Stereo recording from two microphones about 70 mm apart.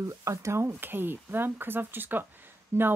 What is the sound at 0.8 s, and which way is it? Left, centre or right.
Speech, right.